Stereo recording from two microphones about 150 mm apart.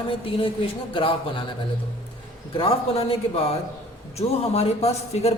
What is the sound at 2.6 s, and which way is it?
A man's voice, 40° left (ahead or behind).